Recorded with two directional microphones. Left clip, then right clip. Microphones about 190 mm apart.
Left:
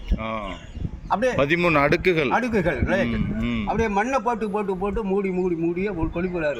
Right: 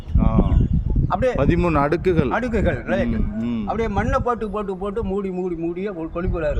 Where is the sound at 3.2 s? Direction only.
40° right (ahead or behind).